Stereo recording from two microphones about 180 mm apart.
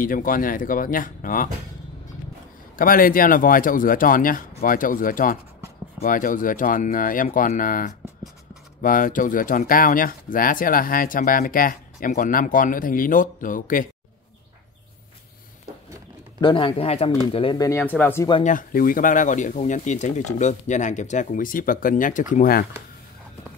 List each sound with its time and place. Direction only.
0.0 s speech: 50° left (ahead or behind)
2.7 s speech: 50° left (ahead or behind)
16.3 s a man's voice: 25° left (ahead or behind)
17.6 s speech: 10° left (ahead or behind)
18.4 s speech: 45° left (ahead or behind)